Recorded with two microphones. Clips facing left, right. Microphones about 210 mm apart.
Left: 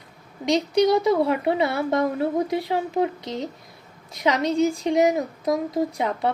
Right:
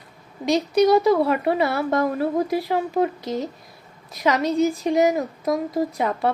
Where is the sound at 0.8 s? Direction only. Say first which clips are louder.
Right 3 dB; 20° left (ahead or behind).